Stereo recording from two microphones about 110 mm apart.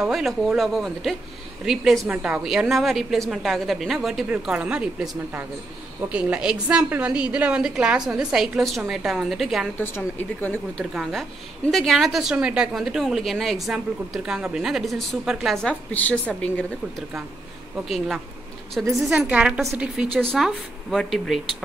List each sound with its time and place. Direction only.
0.0 s a woman's voice: centre (ahead or behind)
9.8 s speech: 15° left (ahead or behind)
10.8 s a woman's voice: centre (ahead or behind)
17.8 s a woman's voice: centre (ahead or behind)